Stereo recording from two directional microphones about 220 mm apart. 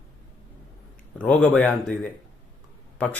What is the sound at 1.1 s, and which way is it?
A man's voice, 5° left (ahead or behind).